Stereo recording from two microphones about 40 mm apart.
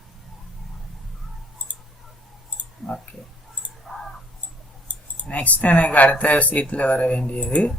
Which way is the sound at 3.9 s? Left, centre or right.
Centre.